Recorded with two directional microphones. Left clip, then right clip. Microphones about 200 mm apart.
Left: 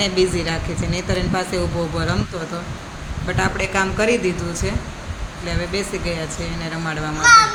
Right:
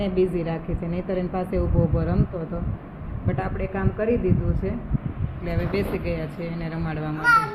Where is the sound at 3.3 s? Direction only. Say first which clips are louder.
Left 8 dB; 5° left (ahead or behind).